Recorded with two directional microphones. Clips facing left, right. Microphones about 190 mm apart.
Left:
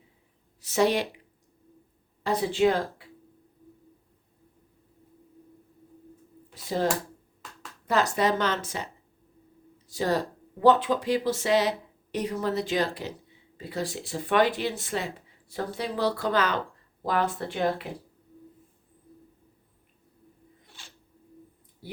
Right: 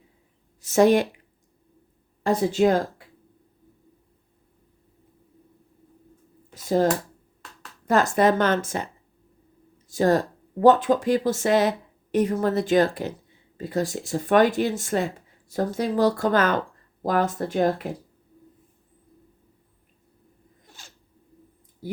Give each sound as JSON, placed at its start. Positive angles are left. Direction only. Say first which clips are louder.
{"t": 0.6, "sound": "speech", "louder": "right 6 dB", "side_deg": -45}
{"t": 2.2, "sound": "speech", "louder": "right 3 dB", "side_deg": -45}
{"t": 6.5, "sound": "finger snapping", "louder": "right 7 dB", "side_deg": -45}
{"t": 7.9, "sound": "speech", "louder": "right 5 dB", "side_deg": -50}
{"t": 9.9, "sound": "speech", "louder": "right 6 dB", "side_deg": -50}
{"t": 20.7, "sound": "a sound", "louder": "right 3 dB", "side_deg": -45}